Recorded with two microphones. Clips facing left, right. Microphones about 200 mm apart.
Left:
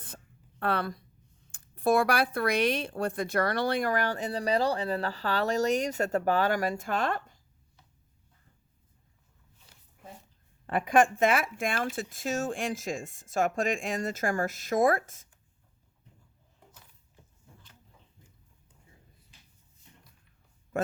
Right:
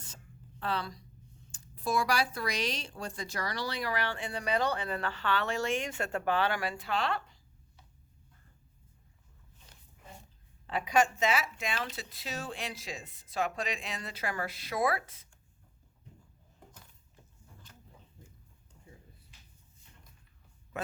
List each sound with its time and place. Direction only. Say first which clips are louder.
0.6 s speech: left 5 dB; 55° left (ahead or behind)
10.7 s speech: left 5 dB; 55° left (ahead or behind)